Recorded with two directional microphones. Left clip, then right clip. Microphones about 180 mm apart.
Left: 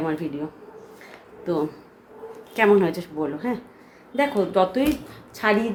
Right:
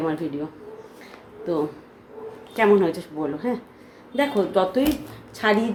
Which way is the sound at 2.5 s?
15° left (ahead or behind).